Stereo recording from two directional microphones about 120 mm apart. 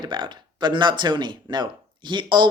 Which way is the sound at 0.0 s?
40° right (ahead or behind).